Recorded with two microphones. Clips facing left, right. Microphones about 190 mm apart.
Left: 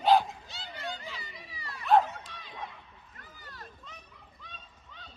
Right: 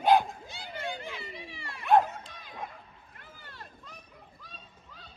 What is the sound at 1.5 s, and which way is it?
Dog, 25° right (ahead or behind).